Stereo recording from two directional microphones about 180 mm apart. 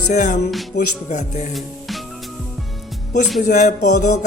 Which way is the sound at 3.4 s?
45° left (ahead or behind).